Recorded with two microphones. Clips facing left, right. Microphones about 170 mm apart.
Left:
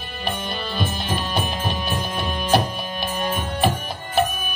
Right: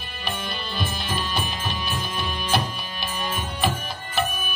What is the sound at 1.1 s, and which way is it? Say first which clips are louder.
Music: left 3 dB; 55° left (ahead or behind).